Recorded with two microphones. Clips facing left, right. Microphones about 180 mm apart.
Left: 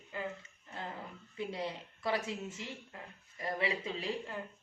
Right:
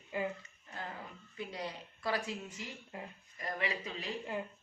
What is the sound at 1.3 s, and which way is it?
A woman's voice, 25° left (ahead or behind).